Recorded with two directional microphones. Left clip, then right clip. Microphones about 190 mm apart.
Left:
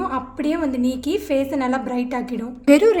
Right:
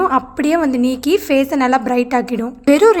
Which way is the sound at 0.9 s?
45° right (ahead or behind).